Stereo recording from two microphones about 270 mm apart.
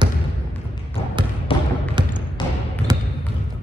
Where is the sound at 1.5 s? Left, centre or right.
Centre.